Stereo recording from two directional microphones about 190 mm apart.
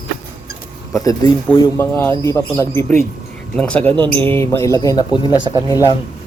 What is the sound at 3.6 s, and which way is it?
Speech, 5° left (ahead or behind).